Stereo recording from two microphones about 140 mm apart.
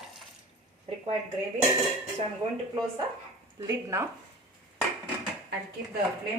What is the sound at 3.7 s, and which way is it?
Speech, 20° right (ahead or behind).